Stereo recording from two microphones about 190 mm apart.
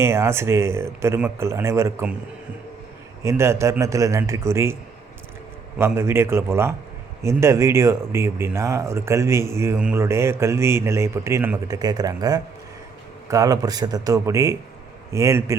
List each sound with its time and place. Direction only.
0.0 s speech: 15° right (ahead or behind)
3.2 s speech: 15° right (ahead or behind)
5.8 s speech: 15° right (ahead or behind)